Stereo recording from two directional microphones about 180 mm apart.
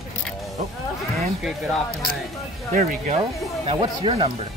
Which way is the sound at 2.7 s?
45° right (ahead or behind).